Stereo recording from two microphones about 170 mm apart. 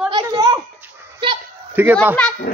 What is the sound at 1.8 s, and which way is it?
Speech, 10° right (ahead or behind).